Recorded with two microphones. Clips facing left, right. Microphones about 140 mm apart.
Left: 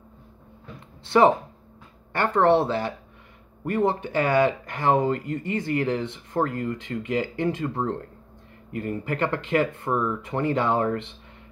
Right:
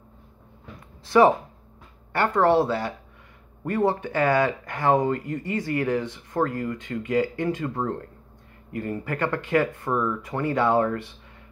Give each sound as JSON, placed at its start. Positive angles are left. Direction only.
{"t": 2.1, "sound": "speech", "side_deg": 25}
{"t": 9.0, "sound": "speech", "side_deg": 20}